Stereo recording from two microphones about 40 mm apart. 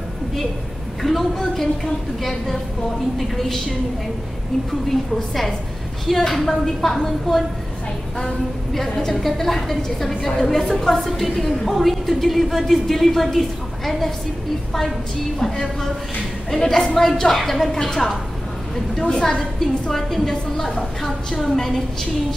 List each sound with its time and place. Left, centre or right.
1.0 s a woman's voice: centre
4.8 s a woman's voice: centre
8.7 s a woman's voice: centre
15.3 s a woman's voice: centre
19.6 s a woman's voice: centre